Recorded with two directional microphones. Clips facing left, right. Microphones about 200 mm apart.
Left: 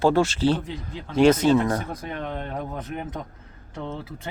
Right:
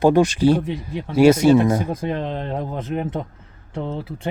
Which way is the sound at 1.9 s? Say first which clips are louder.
Right 7 dB; 25° right (ahead or behind).